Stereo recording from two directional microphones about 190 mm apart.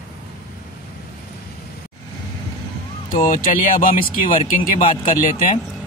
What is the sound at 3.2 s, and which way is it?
Speech, 45° left (ahead or behind).